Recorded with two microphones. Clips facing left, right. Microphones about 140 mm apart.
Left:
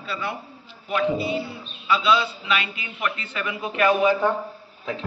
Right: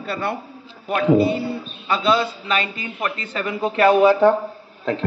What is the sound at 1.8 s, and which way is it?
A man's voice, 50° right (ahead or behind).